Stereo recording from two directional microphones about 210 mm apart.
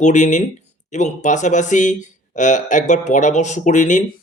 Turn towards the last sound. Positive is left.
turn(degrees=35)  # may be behind; listen again after turning